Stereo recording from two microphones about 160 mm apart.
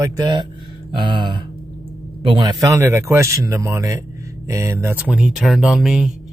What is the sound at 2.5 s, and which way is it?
Speech, 20° right (ahead or behind).